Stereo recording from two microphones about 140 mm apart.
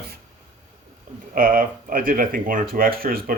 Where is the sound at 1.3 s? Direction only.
90° right.